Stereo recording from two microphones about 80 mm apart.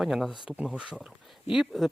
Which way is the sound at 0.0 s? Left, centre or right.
Centre.